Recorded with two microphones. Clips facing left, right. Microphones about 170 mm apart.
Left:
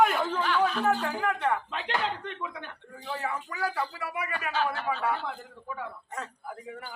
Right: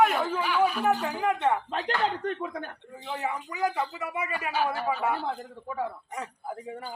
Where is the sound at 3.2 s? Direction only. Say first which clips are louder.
Right 4 dB; 20° right (ahead or behind).